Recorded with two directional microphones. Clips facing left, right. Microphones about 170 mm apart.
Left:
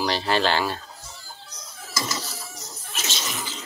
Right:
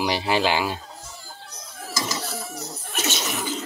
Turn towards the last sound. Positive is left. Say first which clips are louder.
# right 5 dB
turn(degrees=-55)  # may be behind; listen again after turning